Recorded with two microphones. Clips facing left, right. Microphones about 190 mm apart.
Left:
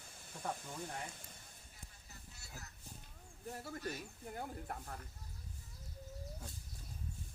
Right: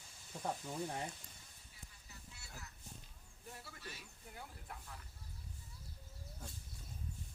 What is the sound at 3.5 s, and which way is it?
Speech, 45° left (ahead or behind).